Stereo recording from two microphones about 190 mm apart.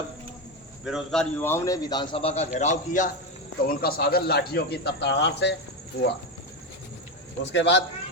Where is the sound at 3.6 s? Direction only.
50° left (ahead or behind).